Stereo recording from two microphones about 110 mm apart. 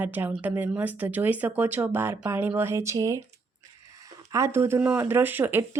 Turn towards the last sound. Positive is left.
turn(degrees=-20)  # may be behind; listen again after turning